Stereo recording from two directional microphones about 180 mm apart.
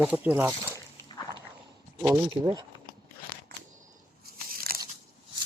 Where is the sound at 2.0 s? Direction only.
20° right (ahead or behind).